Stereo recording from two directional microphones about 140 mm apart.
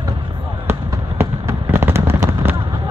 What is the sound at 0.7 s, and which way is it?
Fireworks, 15° right (ahead or behind).